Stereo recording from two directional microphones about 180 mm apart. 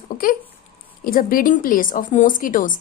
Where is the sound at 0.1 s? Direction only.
50° left (ahead or behind).